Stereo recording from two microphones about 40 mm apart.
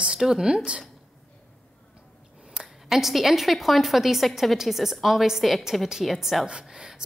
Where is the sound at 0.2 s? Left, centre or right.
Centre.